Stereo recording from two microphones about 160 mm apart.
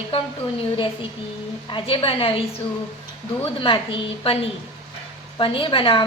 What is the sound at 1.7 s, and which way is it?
Speech, 35° left (ahead or behind).